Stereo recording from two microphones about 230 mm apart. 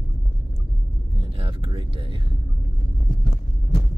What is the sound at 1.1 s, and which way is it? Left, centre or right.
Vehicle, right.